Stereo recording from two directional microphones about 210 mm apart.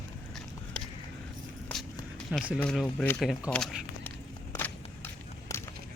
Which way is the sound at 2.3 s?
Centre (ahead or behind).